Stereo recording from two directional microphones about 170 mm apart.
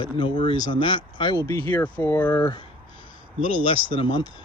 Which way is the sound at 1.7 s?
10° left (ahead or behind).